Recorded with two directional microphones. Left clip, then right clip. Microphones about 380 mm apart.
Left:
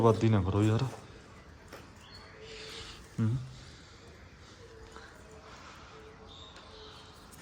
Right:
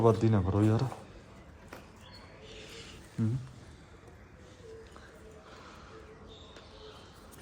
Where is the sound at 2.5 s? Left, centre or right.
Left.